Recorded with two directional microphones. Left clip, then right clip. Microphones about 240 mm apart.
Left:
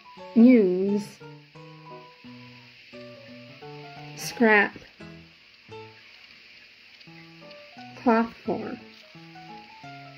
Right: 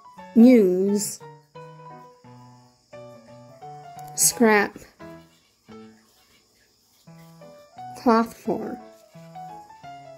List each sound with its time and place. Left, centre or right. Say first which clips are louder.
0.4 s speech: right 3 dB; right
4.1 s speech: right 2 dB; right
8.0 s speech: right 3 dB; right